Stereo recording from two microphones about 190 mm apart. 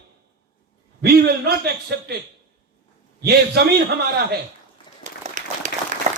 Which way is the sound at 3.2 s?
55° right (ahead or behind).